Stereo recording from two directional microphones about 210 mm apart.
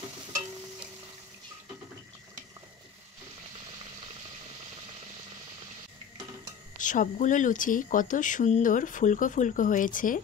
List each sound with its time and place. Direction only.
6.8 s speech: 40° left (ahead or behind)